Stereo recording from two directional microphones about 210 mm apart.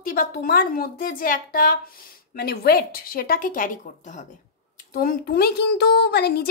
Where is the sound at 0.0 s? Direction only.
40° left (ahead or behind).